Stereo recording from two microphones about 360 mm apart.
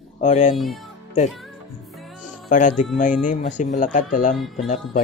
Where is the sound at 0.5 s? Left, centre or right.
Centre.